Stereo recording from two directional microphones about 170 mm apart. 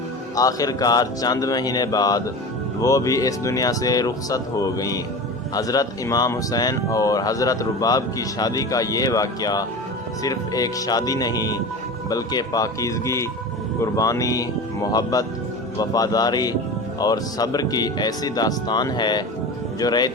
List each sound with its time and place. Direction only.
0.3 s speech: 20° left (ahead or behind)